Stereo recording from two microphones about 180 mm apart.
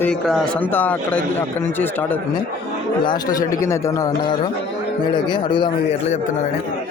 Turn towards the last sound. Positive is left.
turn(degrees=25)  # may be behind; listen again after turning